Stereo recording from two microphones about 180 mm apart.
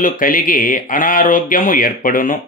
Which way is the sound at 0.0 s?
50° left (ahead or behind).